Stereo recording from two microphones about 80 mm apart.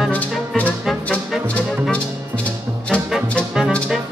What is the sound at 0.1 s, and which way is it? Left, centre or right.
Music, centre.